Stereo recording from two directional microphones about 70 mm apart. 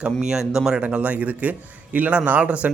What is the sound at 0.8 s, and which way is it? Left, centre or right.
A man's voice, centre.